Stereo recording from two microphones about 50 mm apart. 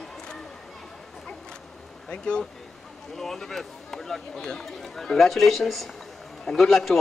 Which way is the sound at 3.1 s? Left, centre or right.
Centre.